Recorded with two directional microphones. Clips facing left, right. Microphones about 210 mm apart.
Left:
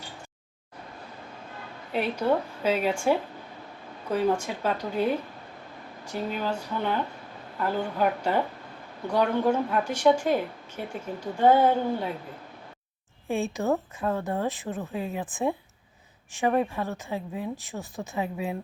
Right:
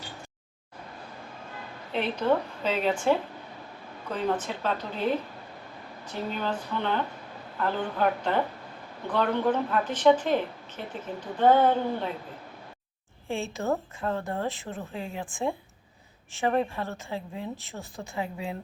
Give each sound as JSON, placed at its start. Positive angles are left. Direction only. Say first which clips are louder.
{"t": 1.9, "sound": "a woman's voice", "louder": "even", "side_deg": 10}
{"t": 13.2, "sound": "a woman's voice", "louder": "left 3 dB", "side_deg": 15}